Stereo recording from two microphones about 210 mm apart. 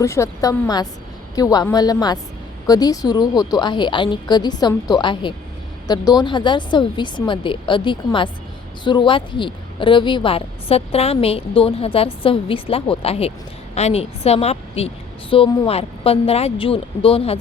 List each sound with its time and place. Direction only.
0.0 s a woman's voice: 15° left (ahead or behind)